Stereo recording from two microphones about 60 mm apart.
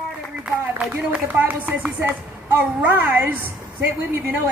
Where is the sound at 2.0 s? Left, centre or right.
Right.